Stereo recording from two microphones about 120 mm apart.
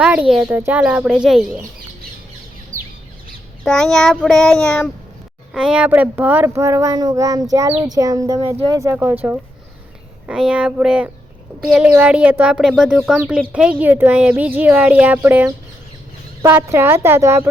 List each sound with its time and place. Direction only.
0.0 s speech: 10° right (ahead or behind)
2.7 s bird: 90° right
3.6 s child singing: 5° left (ahead or behind)
5.5 s speech: 5° right (ahead or behind)
10.2 s speech: 10° right (ahead or behind)
11.6 s child singing: centre (ahead or behind)
11.9 s speech: 15° right (ahead or behind)
12.6 s child singing: 5° right (ahead or behind)
13.1 s speech: 10° right (ahead or behind)